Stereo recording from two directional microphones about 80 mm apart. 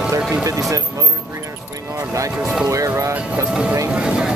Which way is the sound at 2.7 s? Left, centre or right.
Right.